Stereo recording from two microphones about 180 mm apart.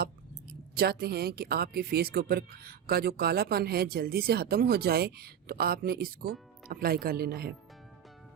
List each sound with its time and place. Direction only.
0.8 s speech: 60° right (ahead or behind)